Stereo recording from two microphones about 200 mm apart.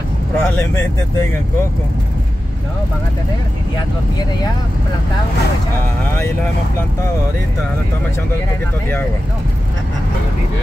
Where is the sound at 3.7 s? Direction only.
20° left (ahead or behind).